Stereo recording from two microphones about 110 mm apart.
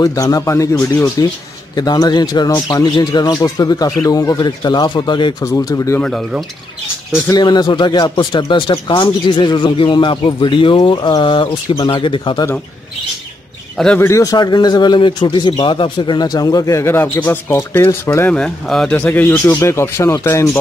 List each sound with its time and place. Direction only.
0.0 s speech: 30° left (ahead or behind)
5.4 s speech: 25° left (ahead or behind)
5.9 s speech: 10° left (ahead or behind)
7.3 s speech: 40° left (ahead or behind)
13.9 s speech: 25° left (ahead or behind)
16.8 s speech: 20° left (ahead or behind)
18.3 s speech: 5° left (ahead or behind)
18.9 s speech: 15° left (ahead or behind)